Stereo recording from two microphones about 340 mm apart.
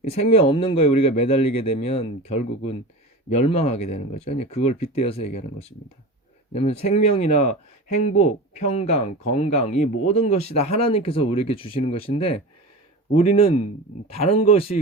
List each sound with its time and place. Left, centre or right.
0.0 s speech: centre